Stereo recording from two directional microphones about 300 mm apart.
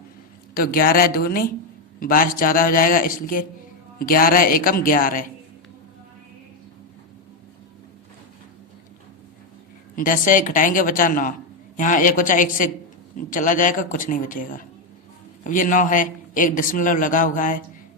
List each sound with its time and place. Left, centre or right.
0.5 s a man's voice: left
9.9 s a man's voice: left